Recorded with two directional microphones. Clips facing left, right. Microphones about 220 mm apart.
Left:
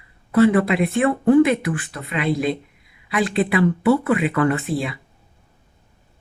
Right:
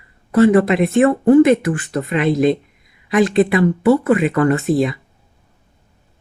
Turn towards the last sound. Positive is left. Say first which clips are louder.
# right 6 dB
turn(degrees=-45)  # may be behind; listen again after turning